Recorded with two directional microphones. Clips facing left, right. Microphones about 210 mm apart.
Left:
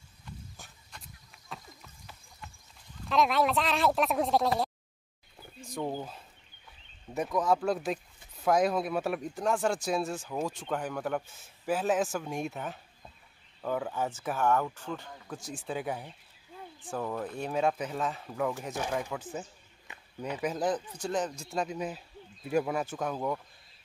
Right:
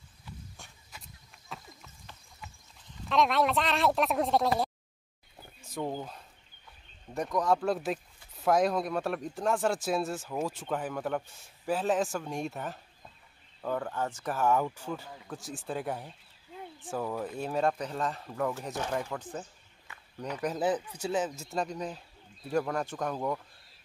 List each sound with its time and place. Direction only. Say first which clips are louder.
0.2 s horse: left 1 dB; centre (ahead or behind)
3.1 s speech: even; centre (ahead or behind)
5.6 s wild animals: even; 5° right (ahead or behind)
5.9 s speech: left 1 dB; 5° left (ahead or behind)
19.9 s a sound: left 1 dB; 20° left (ahead or behind)
20.3 s speech: right 1 dB; centre (ahead or behind)